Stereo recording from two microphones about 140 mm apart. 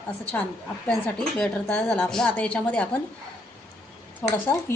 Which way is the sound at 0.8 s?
5° left (ahead or behind).